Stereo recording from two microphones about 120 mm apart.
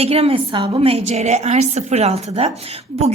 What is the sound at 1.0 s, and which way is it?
A woman's voice, 70° right (ahead or behind).